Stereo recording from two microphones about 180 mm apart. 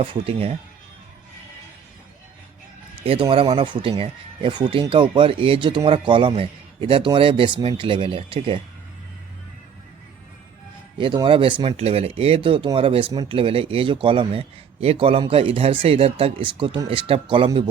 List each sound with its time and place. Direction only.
0.0 s speech: 30° right (ahead or behind)
3.0 s speech: 30° right (ahead or behind)
10.9 s speech: 25° right (ahead or behind)